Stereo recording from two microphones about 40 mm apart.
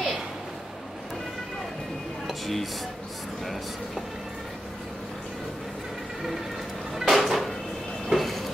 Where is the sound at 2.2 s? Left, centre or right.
Centre.